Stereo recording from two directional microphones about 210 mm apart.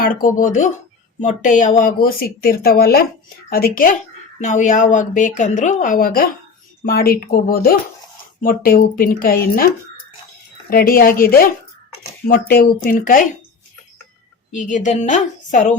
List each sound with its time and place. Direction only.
0.0 s a woman's voice: 40° left (ahead or behind)
10.7 s a woman's voice: 45° left (ahead or behind)
14.5 s speech: 35° left (ahead or behind)